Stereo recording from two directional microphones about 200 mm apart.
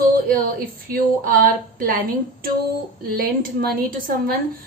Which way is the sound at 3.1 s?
45° right (ahead or behind).